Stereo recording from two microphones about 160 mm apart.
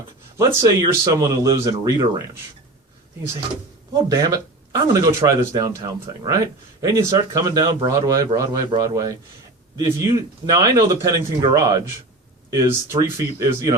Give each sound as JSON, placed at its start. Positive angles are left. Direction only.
{"t": 0.3, "sound": "speech", "side_deg": -20}
{"t": 3.9, "sound": "speech", "side_deg": -20}